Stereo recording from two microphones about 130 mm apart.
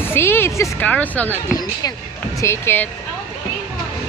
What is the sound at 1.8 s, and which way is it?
Speech, 30° left (ahead or behind).